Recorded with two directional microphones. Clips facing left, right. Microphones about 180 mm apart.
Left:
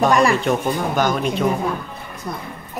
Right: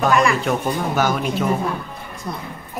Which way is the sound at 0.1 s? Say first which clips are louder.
Left 2 dB; 35° left (ahead or behind).